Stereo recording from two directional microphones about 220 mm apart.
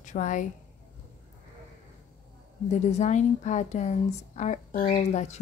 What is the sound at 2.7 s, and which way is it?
A woman's voice, 30° left (ahead or behind).